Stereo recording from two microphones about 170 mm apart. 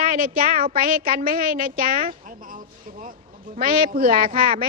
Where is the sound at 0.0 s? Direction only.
55° right (ahead or behind).